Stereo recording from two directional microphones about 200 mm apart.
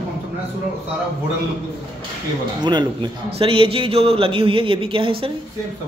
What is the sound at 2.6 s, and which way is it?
A man's voice, 20° right (ahead or behind).